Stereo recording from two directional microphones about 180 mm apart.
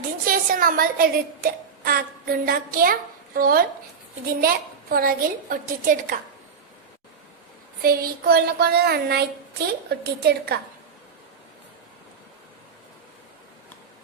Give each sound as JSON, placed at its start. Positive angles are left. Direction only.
{"t": 0.3, "sound": "a woman's voice", "side_deg": -55}
{"t": 7.8, "sound": "a woman's voice", "side_deg": -55}